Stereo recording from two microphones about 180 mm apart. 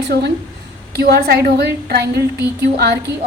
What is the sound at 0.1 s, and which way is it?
A woman's voice, 65° right (ahead or behind).